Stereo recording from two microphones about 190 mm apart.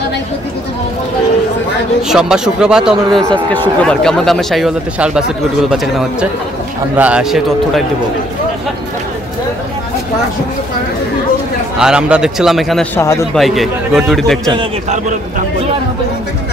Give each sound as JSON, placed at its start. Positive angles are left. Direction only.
{"t": 2.0, "sound": "speech", "side_deg": -5}
{"t": 11.8, "sound": "speech", "side_deg": -5}
{"t": 12.9, "sound": "a man's voice", "side_deg": 15}
{"t": 13.3, "sound": "speech", "side_deg": 0}
{"t": 14.5, "sound": "a man's voice", "side_deg": -25}